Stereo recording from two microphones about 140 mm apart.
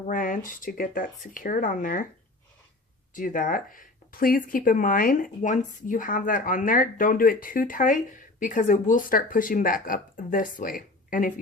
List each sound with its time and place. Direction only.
0.1 s speech: 75° left (ahead or behind)
3.2 s speech: 75° left (ahead or behind)